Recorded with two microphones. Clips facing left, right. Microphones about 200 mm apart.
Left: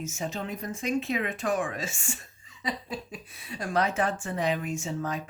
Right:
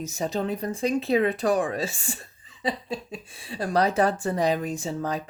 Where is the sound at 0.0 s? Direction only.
35° right (ahead or behind).